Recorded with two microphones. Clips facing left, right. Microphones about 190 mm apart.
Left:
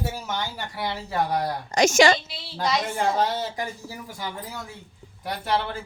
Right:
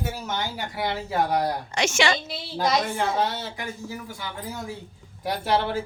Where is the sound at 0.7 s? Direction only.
10° right (ahead or behind).